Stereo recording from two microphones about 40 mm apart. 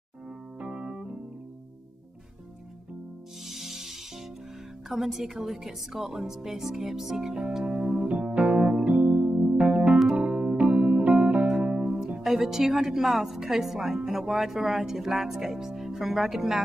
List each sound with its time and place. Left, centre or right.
0.6 s keyboard: right
3.4 s music: centre
4.8 s speech: centre
7.8 s music: centre
8.1 s music: right
12.2 s speech: centre